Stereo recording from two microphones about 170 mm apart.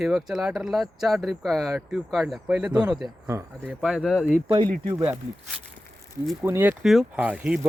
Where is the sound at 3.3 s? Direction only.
20° right (ahead or behind).